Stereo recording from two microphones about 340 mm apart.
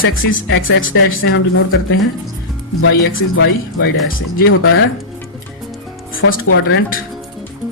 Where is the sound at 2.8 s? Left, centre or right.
Left.